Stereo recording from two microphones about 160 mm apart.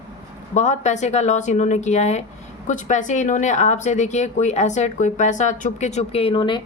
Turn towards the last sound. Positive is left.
turn(degrees=30)  # may be behind; listen again after turning